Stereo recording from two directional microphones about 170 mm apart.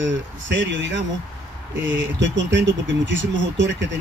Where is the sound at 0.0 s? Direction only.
90° right.